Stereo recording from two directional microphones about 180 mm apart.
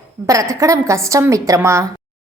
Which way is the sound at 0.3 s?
20° right (ahead or behind).